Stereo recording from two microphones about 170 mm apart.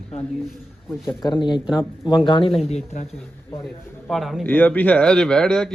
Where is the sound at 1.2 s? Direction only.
25° left (ahead or behind).